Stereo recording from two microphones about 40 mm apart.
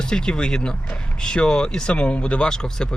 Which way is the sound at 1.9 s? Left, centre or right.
Left.